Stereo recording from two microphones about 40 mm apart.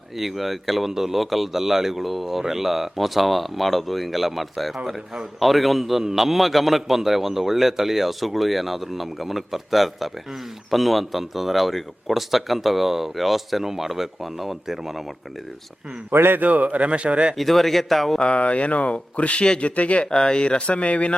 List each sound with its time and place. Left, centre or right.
0.2 s a man's voice: centre
16.1 s a man's voice: right
16.4 s speech: right
17.3 s a man's voice: centre
18.2 s speech: left
20.1 s speech: centre